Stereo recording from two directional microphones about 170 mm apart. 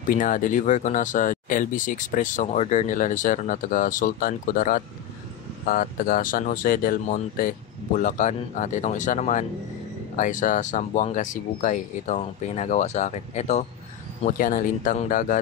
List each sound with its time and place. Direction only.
0.1 s speech: 50° left (ahead or behind)
14.2 s speech: 50° left (ahead or behind)